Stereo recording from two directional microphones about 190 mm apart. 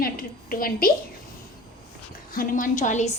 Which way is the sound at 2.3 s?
45° left (ahead or behind).